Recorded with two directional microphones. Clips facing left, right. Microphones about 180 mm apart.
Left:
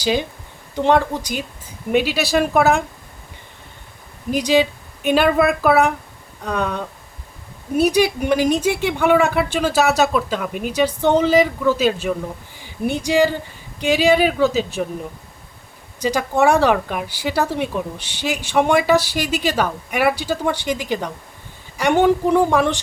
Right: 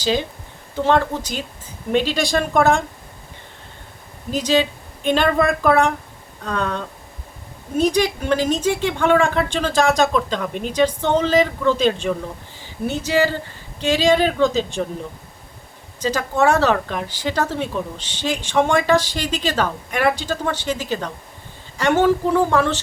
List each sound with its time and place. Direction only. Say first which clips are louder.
0.0 s a woman's voice: left 1 dB; 10° left (ahead or behind)
4.3 s speech: left 2 dB; 10° left (ahead or behind)
16.0 s speech: left 2 dB; 10° left (ahead or behind)